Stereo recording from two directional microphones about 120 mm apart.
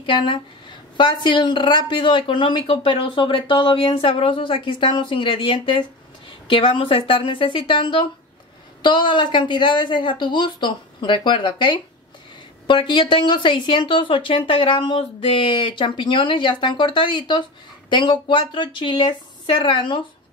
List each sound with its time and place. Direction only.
0.0 s a woman's voice: 45° left (ahead or behind)